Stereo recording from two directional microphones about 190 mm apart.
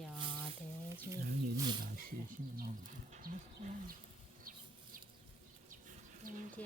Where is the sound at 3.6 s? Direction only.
40° right (ahead or behind).